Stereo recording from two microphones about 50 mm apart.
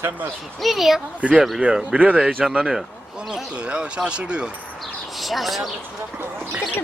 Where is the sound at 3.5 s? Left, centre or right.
Right.